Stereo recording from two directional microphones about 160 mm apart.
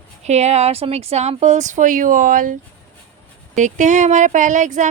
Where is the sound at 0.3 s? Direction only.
45° right (ahead or behind).